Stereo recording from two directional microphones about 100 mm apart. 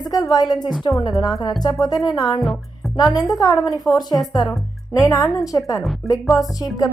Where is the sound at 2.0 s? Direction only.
45° left (ahead or behind).